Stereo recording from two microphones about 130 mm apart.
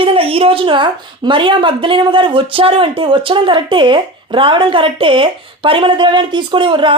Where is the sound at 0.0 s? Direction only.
45° right (ahead or behind).